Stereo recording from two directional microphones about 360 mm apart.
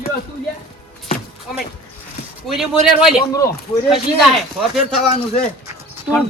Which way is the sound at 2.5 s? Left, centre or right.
Centre.